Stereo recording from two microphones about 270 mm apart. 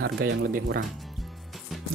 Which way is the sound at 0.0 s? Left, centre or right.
Right.